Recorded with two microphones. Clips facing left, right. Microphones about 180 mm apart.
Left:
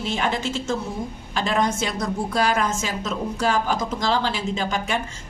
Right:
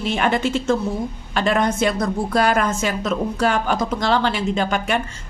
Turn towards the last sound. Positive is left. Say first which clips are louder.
# right 4 dB
turn(degrees=-60)  # may be behind; listen again after turning